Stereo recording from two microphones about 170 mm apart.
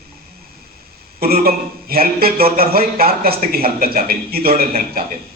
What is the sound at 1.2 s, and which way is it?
A man's voice, 60° right (ahead or behind).